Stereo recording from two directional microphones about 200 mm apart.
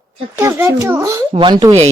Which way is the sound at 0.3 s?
15° right (ahead or behind).